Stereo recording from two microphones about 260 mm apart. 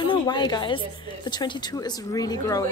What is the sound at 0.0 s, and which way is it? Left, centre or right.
A woman's voice, centre.